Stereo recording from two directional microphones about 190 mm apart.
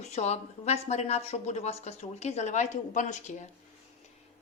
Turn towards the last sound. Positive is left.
turn(degrees=40)  # may be behind; listen again after turning